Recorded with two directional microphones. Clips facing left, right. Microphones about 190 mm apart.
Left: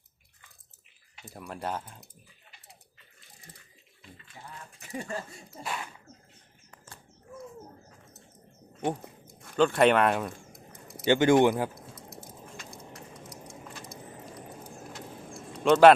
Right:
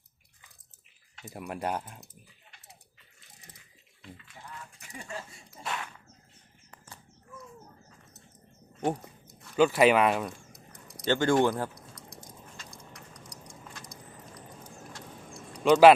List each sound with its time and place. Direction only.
1.2 s speech: 10° right (ahead or behind)
4.9 s speech: 35° left (ahead or behind)
5.6 s speech: 5° left (ahead or behind)
8.8 s a sound: 5° right (ahead or behind)
11.1 s speech: 20° left (ahead or behind)
11.5 s a sound: 5° left (ahead or behind)
12.8 s a sound: 25° left (ahead or behind)
14.6 s vehicle: 10° left (ahead or behind)
15.6 s speech: 5° right (ahead or behind)